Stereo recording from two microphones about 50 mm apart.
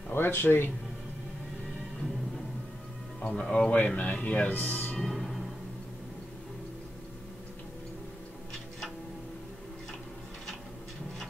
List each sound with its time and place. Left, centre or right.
0.1 s speech: left
3.2 s speech: centre
3.7 s speech: left
5.1 s music: centre